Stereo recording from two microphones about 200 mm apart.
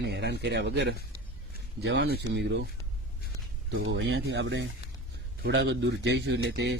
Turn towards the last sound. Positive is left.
turn(degrees=-60)  # may be behind; listen again after turning